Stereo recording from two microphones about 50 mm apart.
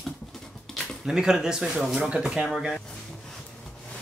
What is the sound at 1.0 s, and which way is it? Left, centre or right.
Speech, centre.